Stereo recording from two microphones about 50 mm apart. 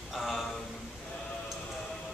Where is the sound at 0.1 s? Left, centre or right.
Centre.